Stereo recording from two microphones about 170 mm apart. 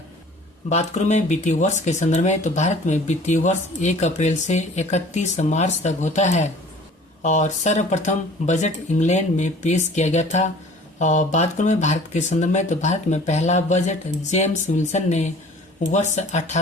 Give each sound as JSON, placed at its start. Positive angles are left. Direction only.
{"t": 0.7, "sound": "speech", "side_deg": 45}